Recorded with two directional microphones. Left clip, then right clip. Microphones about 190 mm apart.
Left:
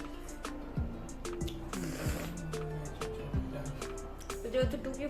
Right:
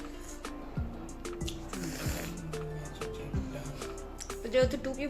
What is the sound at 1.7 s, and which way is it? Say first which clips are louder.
Music: even; centre (ahead or behind).